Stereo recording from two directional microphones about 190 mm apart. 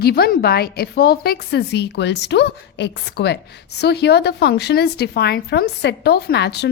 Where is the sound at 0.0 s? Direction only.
55° left (ahead or behind).